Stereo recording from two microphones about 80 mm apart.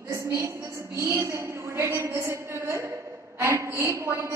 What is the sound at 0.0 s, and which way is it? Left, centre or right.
A woman's voice, right.